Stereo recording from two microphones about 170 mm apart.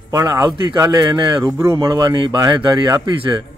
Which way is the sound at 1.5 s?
15° right (ahead or behind).